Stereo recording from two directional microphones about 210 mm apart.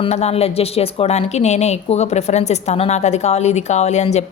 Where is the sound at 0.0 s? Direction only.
30° left (ahead or behind).